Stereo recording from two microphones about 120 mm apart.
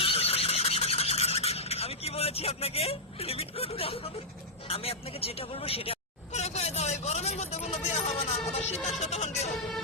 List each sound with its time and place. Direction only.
0.0 s neigh: 55° left (ahead or behind)
4.7 s vehicle: 55° left (ahead or behind)